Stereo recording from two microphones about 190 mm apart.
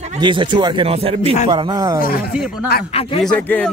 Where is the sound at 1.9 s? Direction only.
50° left (ahead or behind).